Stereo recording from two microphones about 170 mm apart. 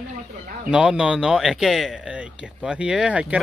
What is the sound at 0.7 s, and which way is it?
Speech, 5° right (ahead or behind).